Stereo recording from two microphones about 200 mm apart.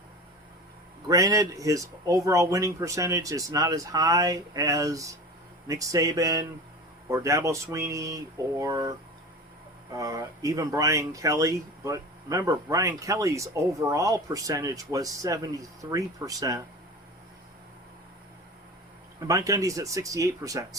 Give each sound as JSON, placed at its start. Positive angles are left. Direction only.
{"t": 1.0, "sound": "speech", "side_deg": -15}
{"t": 19.3, "sound": "speech", "side_deg": -15}